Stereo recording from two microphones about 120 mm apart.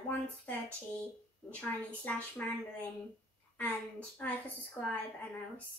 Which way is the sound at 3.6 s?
15° left (ahead or behind).